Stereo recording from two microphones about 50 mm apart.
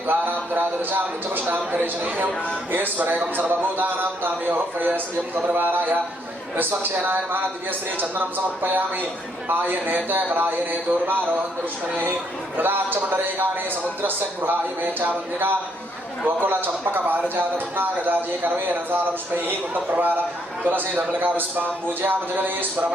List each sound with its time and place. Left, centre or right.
0.1 s a man's voice: right
12.5 s a man's voice: right